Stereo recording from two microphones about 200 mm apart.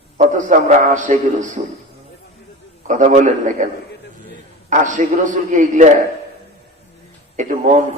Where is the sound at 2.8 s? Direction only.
35° right (ahead or behind).